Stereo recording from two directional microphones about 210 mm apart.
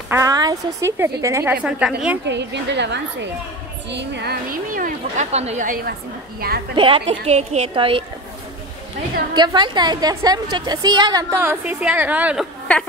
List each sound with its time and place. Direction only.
0.1 s a woman's voice: 15° right (ahead or behind)
2.2 s a woman's voice: 55° right (ahead or behind); by 5.9 s 40° right (ahead or behind)
6.7 s a woman's voice: 25° right (ahead or behind)
9.3 s a woman's voice: 20° right (ahead or behind)